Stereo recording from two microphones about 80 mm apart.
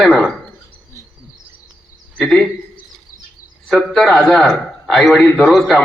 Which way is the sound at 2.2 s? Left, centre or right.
Centre.